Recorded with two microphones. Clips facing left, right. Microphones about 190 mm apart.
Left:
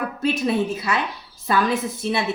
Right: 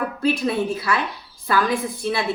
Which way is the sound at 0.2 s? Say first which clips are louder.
Left 1 dB; 20° left (ahead or behind).